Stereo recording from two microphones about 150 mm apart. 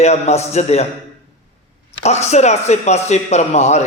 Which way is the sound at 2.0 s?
45° left (ahead or behind).